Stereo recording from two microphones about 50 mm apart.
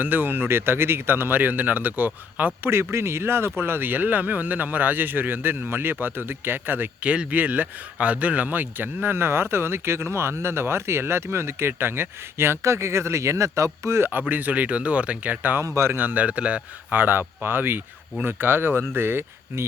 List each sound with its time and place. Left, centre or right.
0.0 s speech: right
2.6 s speech: right
7.0 s speech: right
14.0 s speech: right
15.6 s speech: right
16.0 s a man's voice: right
16.9 s speech: right